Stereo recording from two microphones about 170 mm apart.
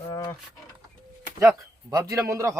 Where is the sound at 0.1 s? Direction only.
15° left (ahead or behind).